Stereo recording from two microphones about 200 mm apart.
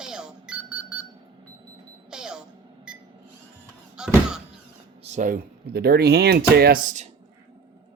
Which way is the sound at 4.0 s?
5° right (ahead or behind).